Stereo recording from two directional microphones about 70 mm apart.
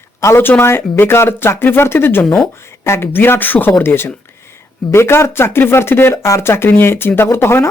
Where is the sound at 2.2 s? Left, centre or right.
Centre.